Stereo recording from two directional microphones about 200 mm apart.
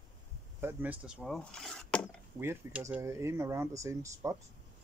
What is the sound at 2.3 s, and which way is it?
Speech, 10° right (ahead or behind).